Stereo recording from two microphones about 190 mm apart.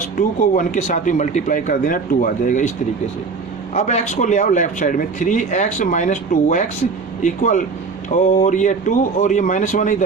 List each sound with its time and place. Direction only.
0.2 s speech: 45° left (ahead or behind)
3.8 s speech: 35° left (ahead or behind)